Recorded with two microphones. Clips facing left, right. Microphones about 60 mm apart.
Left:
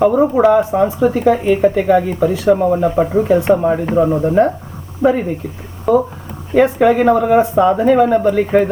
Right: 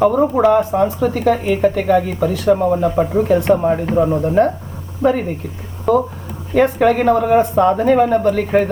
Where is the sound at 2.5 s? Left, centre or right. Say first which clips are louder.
Even; centre.